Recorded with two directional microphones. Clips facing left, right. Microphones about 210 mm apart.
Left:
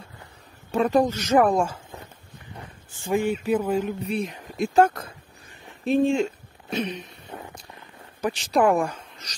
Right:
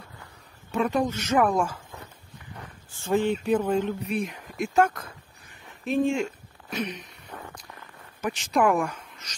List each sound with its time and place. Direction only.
0.7 s speech: 35° left (ahead or behind)
3.0 s speech: 10° left (ahead or behind)
4.1 s speech: 30° left (ahead or behind)
6.7 s a sound: 25° left (ahead or behind)
8.2 s speech: 35° left (ahead or behind)